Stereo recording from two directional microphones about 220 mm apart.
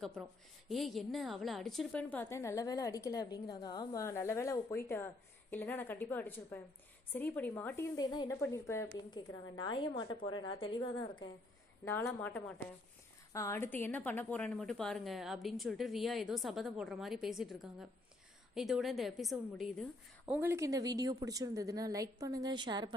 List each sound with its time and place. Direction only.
0.7 s a woman's voice: centre (ahead or behind); by 11.2 s 25° left (ahead or behind)
11.9 s a woman's voice: 10° left (ahead or behind); by 22.9 s 20° right (ahead or behind)